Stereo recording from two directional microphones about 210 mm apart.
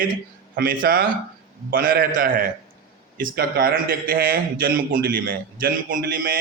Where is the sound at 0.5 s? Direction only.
40° right (ahead or behind).